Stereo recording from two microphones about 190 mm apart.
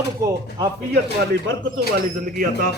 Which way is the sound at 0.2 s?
15° right (ahead or behind).